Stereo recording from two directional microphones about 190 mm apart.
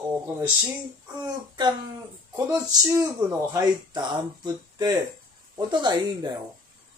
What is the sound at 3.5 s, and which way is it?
Speech, 20° right (ahead or behind).